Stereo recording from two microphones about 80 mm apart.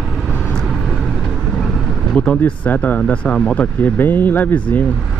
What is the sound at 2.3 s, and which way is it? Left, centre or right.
Speech, centre.